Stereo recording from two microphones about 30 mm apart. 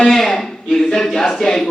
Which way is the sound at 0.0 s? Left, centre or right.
Centre.